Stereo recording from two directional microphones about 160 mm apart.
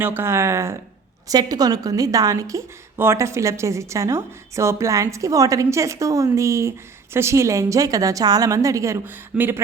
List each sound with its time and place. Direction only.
0.0 s a woman's voice: 15° right (ahead or behind)